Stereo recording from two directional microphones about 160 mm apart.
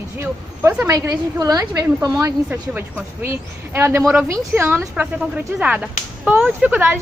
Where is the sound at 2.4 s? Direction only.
10° right (ahead or behind).